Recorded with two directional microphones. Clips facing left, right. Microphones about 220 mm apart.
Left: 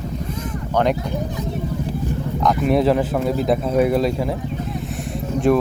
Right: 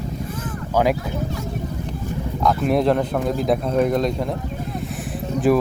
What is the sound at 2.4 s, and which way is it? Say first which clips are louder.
Speech: left 1 dB; centre (ahead or behind).